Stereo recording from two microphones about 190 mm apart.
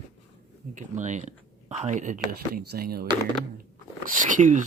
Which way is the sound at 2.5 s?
55° right (ahead or behind).